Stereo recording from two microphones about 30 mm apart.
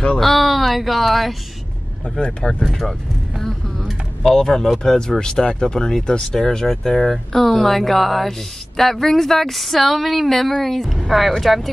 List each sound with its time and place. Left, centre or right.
0.2 s speech: centre
2.0 s speech: left
2.7 s speech: centre
4.2 s speech: centre
5.2 s speech: left; by 11.7 s centre